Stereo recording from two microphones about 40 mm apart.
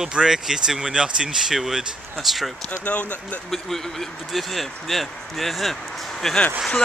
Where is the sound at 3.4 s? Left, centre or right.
Centre.